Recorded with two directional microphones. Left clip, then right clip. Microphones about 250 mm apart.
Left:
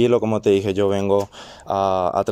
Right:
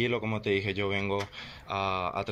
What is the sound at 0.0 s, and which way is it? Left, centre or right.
Speech, left.